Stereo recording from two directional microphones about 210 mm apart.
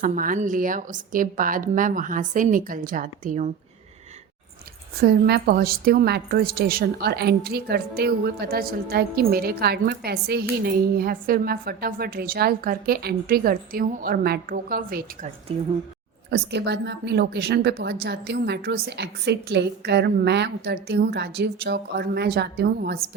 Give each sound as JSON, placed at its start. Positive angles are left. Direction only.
{"t": 0.0, "sound": "a woman's voice", "side_deg": -40}
{"t": 4.9, "sound": "a woman's voice", "side_deg": -50}
{"t": 15.5, "sound": "a woman's voice", "side_deg": -25}
{"t": 16.3, "sound": "a woman's voice", "side_deg": -55}